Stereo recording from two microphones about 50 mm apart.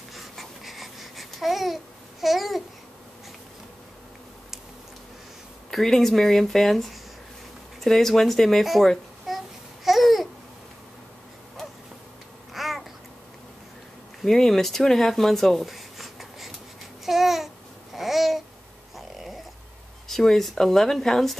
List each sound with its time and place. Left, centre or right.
0.1 s babbling: centre
5.7 s speech: centre
9.3 s baby cry: centre
9.8 s babbling: centre
12.5 s babbling: centre
14.2 s speech: centre
17.0 s babbling: centre
18.9 s a sound: centre
20.1 s speech: centre